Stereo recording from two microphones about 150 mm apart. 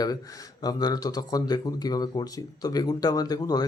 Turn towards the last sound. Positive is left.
turn(degrees=25)  # may be behind; listen again after turning